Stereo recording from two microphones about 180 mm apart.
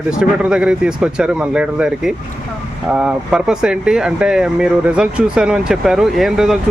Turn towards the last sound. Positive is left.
turn(degrees=0)  # may be behind; listen again after turning